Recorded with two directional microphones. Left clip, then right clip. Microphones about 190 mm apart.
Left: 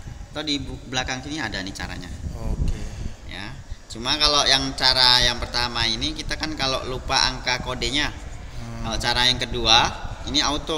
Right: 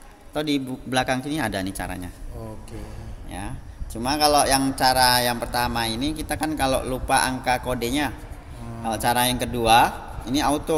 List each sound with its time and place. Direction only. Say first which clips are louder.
0.3 s speech: right 2 dB; 55° right (ahead or behind)
3.9 s speech: right 1 dB; 45° right (ahead or behind)